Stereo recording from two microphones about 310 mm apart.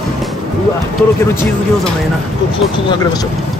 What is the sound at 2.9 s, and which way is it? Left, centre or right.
Speech, centre.